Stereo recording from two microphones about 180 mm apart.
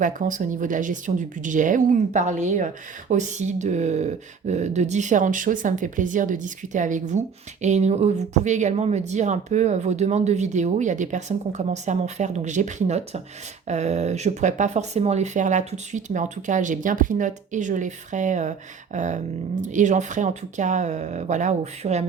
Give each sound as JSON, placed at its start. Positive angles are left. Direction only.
{"t": 0.0, "sound": "speech", "side_deg": -45}